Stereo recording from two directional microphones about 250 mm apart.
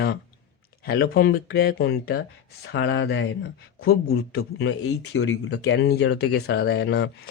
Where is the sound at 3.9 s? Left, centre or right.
Left.